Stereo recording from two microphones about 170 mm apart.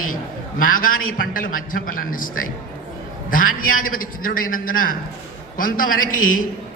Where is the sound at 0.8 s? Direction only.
55° left (ahead or behind).